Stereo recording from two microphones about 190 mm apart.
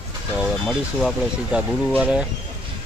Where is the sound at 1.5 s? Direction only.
5° right (ahead or behind).